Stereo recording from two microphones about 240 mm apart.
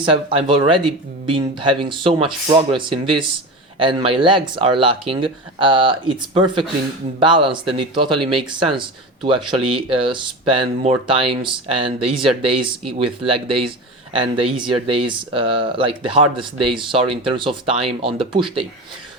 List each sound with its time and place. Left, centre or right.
0.0 s speech: right
14.1 s speech: right